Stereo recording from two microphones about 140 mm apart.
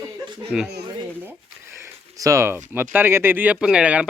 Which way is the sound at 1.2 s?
15° right (ahead or behind).